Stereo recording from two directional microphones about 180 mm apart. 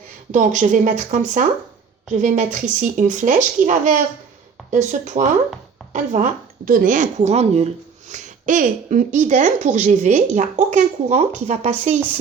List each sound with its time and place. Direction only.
0.3 s speech: 45° right (ahead or behind)